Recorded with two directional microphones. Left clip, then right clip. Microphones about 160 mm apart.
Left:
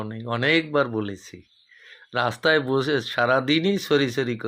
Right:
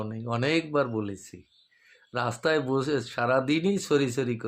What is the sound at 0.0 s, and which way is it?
Speech, 5° left (ahead or behind).